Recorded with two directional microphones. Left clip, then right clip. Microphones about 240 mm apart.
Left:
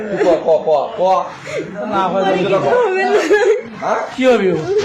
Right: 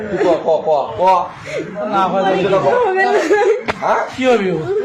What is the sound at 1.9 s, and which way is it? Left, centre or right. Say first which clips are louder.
Speech: even; right.